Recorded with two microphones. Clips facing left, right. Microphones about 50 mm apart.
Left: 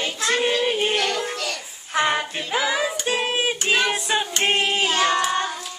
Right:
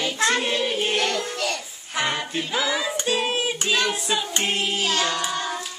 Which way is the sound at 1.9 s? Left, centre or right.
Left.